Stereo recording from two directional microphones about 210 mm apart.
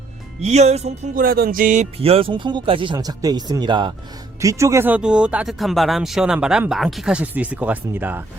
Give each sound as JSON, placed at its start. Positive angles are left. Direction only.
{"t": 0.4, "sound": "speech", "side_deg": -30}